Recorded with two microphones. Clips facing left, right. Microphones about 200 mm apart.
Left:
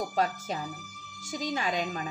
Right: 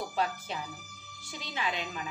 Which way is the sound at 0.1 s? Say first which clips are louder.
Left 3 dB; 40° left (ahead or behind).